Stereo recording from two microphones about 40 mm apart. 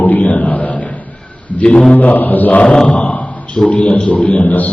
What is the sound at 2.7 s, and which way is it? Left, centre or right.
Speech, centre.